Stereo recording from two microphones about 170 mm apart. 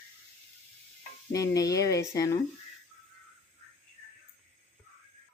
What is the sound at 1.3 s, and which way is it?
Speech, 20° left (ahead or behind).